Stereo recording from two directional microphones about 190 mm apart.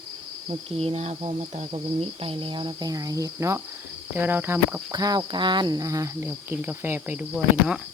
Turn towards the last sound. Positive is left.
turn(degrees=-5)  # may be behind; listen again after turning